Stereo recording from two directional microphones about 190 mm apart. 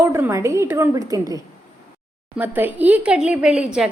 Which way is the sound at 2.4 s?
10° right (ahead or behind).